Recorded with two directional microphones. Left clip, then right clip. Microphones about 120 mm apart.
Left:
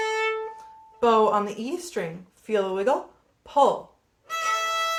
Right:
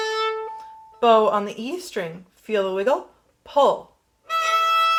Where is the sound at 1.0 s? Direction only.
25° right (ahead or behind).